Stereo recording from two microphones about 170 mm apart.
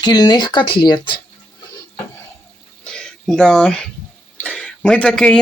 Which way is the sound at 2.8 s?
5° left (ahead or behind).